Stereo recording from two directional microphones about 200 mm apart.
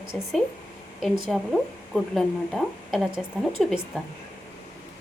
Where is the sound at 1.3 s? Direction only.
Centre (ahead or behind).